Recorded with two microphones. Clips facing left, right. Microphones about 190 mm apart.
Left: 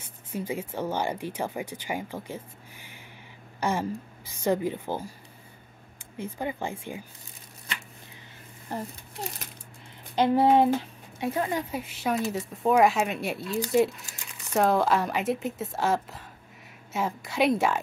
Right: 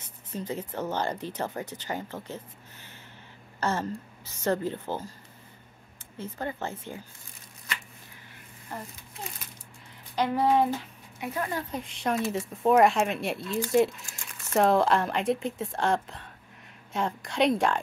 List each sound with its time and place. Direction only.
0.3 s a woman's voice: 10° left (ahead or behind)
6.1 s speech: 15° left (ahead or behind)
10.1 s a sound: 25° left (ahead or behind)
11.5 s speech: 5° left (ahead or behind)